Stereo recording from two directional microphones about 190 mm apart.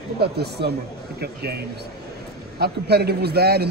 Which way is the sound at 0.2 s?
60° right (ahead or behind).